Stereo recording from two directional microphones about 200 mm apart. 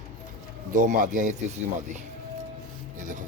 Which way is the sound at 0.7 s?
40° right (ahead or behind).